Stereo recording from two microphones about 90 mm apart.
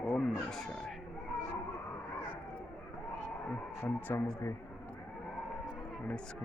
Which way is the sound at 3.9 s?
25° left (ahead or behind).